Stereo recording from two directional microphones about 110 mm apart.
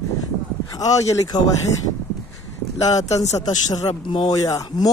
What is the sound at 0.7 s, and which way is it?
Speech, 35° left (ahead or behind).